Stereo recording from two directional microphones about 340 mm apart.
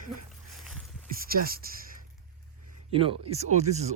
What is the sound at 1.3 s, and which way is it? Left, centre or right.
Speech, right.